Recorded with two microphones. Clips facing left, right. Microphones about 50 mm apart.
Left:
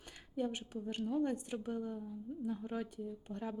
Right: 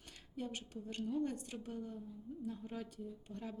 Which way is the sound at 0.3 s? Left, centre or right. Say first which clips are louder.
Left 6 dB; centre.